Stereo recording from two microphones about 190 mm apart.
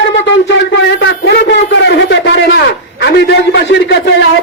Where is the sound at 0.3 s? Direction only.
70° left (ahead or behind).